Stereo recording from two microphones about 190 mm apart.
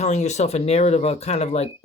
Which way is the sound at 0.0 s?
35° left (ahead or behind).